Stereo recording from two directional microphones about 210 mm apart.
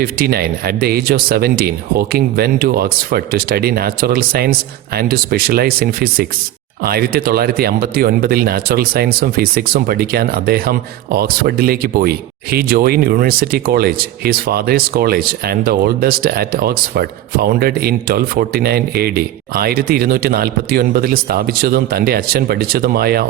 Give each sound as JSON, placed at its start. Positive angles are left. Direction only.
{"t": 0.0, "sound": "speech", "side_deg": -45}